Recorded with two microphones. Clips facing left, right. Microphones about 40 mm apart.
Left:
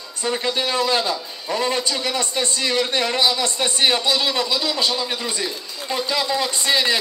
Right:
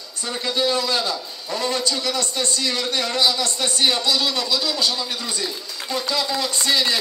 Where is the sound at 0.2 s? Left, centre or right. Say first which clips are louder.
Left 1 dB; left.